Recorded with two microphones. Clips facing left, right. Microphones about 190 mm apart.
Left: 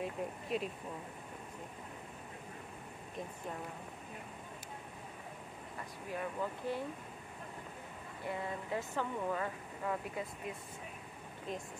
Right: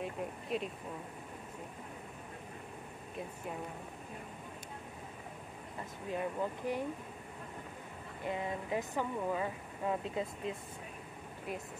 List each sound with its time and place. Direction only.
0.0 s speech: centre (ahead or behind)
6.0 s speech: 15° right (ahead or behind)
8.2 s speech: 20° right (ahead or behind)